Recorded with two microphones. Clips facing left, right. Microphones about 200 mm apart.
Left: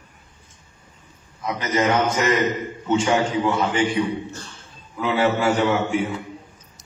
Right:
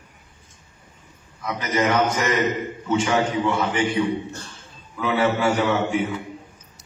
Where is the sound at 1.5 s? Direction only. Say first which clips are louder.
Left 1 dB; 25° left (ahead or behind).